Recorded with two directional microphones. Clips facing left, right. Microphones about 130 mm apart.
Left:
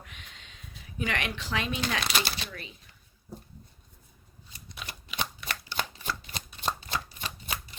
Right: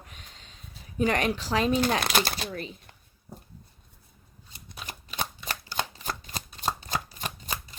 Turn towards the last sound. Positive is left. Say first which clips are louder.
# right 2 dB
turn(degrees=-40)  # may be behind; listen again after turning